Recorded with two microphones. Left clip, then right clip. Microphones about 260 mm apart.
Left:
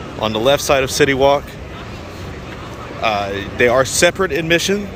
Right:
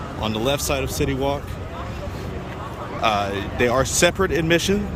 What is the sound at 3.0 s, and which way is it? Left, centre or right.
Speech, centre.